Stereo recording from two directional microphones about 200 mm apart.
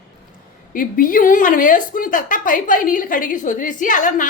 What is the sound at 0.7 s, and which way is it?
A woman's voice, 45° left (ahead or behind).